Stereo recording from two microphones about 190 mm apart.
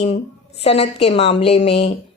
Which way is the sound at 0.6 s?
30° left (ahead or behind).